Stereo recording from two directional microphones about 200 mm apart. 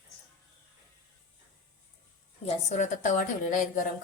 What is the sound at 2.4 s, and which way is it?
A woman's voice, 35° left (ahead or behind).